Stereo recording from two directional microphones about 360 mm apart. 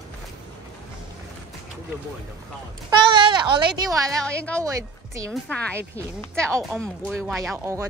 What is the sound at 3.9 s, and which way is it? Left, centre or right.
Speech, centre.